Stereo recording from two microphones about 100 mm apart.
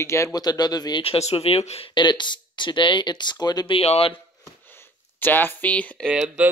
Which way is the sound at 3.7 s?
80° left.